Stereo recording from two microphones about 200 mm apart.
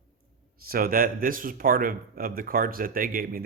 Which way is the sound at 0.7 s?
45° right (ahead or behind).